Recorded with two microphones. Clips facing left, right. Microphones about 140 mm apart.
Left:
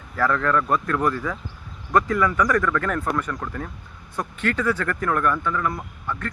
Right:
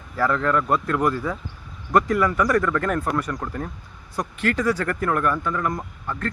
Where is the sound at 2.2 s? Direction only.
35° right (ahead or behind).